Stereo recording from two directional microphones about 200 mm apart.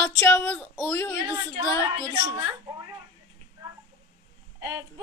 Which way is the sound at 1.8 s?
20° right (ahead or behind).